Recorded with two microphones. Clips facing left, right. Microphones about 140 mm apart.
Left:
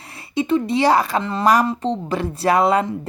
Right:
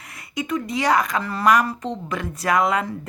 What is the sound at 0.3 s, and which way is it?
A woman's voice, 30° left (ahead or behind).